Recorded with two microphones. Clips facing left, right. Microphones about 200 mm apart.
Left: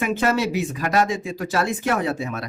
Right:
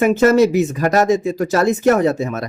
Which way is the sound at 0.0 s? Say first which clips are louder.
Right 9 dB; 45° right (ahead or behind).